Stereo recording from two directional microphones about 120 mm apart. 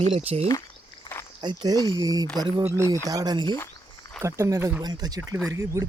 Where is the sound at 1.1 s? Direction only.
45° left (ahead or behind).